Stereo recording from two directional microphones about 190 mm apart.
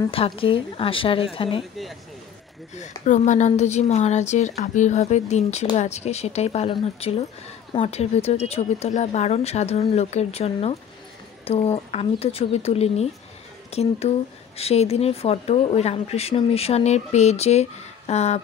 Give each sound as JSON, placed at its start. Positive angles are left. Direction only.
{"t": 0.1, "sound": "speech", "side_deg": 30}
{"t": 1.6, "sound": "speech", "side_deg": 0}
{"t": 3.1, "sound": "a woman's voice", "side_deg": 40}